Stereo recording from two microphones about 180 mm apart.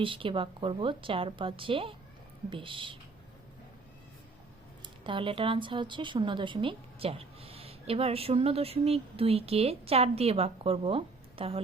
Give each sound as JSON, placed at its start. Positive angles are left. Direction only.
{"t": 0.0, "sound": "a woman's voice", "side_deg": -30}
{"t": 5.0, "sound": "a woman's voice", "side_deg": -30}